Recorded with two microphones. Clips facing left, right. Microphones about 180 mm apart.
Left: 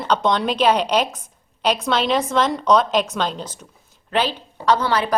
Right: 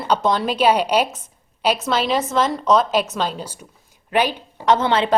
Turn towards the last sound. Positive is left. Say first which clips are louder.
# right 2 dB
turn(degrees=-25)  # may be behind; listen again after turning